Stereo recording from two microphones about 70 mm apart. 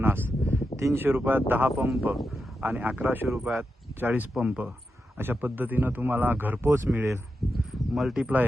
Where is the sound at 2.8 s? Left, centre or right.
Right.